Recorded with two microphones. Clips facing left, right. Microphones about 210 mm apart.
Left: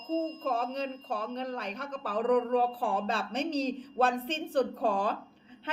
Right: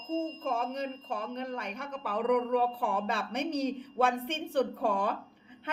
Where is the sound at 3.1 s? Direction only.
30° left (ahead or behind).